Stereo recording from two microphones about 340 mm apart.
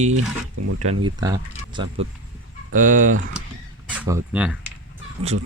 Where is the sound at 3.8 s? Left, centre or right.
Centre.